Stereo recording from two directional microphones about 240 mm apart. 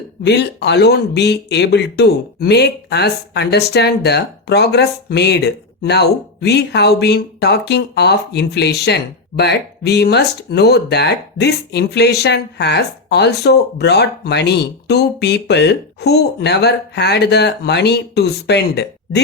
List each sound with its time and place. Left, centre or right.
0.2 s speech: left